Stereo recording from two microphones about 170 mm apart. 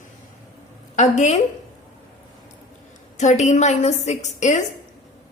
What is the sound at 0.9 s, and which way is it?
Speech, 45° left (ahead or behind).